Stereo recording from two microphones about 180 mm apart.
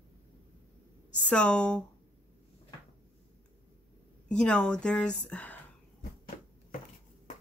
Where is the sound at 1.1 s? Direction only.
5° left (ahead or behind).